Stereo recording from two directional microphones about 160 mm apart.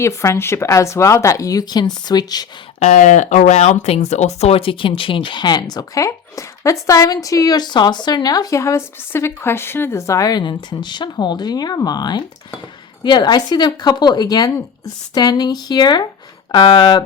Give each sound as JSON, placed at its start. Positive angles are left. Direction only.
{"t": 0.0, "sound": "speech", "side_deg": 15}
{"t": 2.8, "sound": "speech", "side_deg": 50}